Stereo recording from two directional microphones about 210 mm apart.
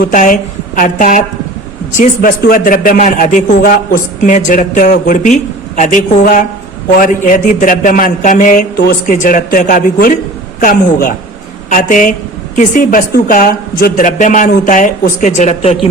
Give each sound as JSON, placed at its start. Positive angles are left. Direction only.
{"t": 0.0, "sound": "a man's voice", "side_deg": 40}
{"t": 8.8, "sound": "a man's voice", "side_deg": 50}
{"t": 9.1, "sound": "a man's voice", "side_deg": 40}